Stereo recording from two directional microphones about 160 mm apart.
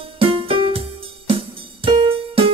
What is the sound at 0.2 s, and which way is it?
Music, 35° right (ahead or behind).